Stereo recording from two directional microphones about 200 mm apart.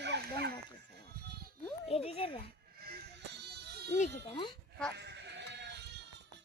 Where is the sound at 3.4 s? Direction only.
55° right (ahead or behind).